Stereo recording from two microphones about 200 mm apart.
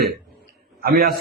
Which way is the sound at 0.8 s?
50° right (ahead or behind).